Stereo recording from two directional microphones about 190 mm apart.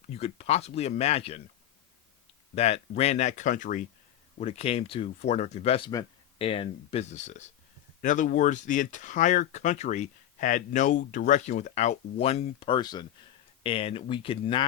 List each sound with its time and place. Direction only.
0.1 s speech: 35° left (ahead or behind)
2.6 s speech: 35° left (ahead or behind)
4.4 s speech: 30° left (ahead or behind)